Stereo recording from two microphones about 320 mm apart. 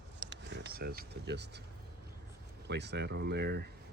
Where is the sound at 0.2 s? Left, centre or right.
Right.